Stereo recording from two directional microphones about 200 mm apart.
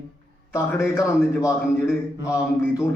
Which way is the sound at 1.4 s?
5° right (ahead or behind).